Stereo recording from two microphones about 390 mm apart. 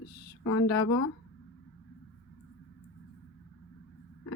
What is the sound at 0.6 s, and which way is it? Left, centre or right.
Speech, left.